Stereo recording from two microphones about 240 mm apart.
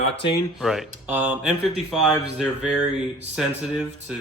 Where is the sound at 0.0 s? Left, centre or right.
Left.